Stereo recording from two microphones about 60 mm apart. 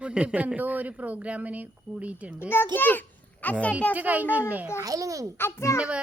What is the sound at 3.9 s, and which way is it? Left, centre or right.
Speech, right.